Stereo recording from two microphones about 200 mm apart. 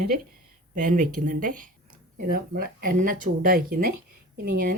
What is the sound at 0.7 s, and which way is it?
Speech, 40° right (ahead or behind).